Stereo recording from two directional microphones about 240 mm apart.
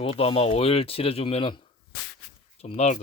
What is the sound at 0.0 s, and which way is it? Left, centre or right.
Rub, left.